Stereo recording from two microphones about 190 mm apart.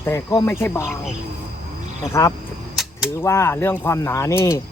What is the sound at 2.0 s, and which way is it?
Speech, 15° left (ahead or behind).